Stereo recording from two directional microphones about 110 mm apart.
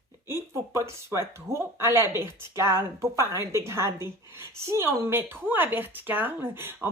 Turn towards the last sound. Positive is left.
turn(degrees=-20)  # may be behind; listen again after turning